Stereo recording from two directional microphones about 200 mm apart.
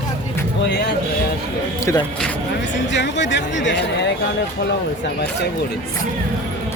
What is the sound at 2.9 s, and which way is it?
Speech, 60° left (ahead or behind).